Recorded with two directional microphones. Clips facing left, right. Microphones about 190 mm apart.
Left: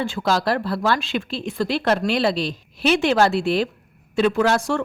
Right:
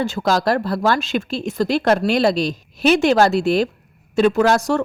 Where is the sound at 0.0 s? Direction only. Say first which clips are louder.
Right 3 dB; 40° right (ahead or behind).